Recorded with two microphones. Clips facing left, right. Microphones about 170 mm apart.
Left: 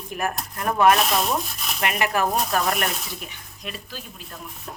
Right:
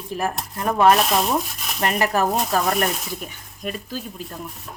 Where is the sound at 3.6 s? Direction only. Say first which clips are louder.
Right 7 dB; 45° right (ahead or behind).